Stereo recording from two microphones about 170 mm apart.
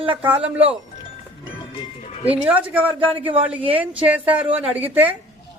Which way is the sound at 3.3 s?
35° right (ahead or behind).